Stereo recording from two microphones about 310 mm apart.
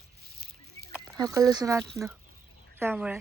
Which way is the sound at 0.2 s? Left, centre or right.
Right.